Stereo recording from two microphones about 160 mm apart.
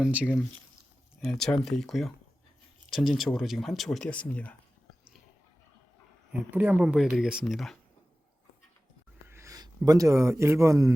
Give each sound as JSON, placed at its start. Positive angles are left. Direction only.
{"t": 0.0, "sound": "speech", "side_deg": -5}
{"t": 1.2, "sound": "speech", "side_deg": 5}
{"t": 6.3, "sound": "speech", "side_deg": -10}
{"t": 9.3, "sound": "speech", "side_deg": -20}